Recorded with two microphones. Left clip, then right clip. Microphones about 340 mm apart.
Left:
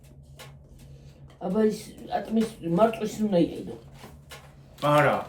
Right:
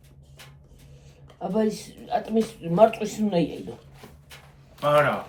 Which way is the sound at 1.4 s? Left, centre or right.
Right.